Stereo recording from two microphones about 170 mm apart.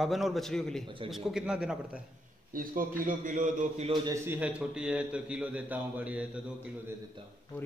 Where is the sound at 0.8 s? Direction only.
30° right (ahead or behind).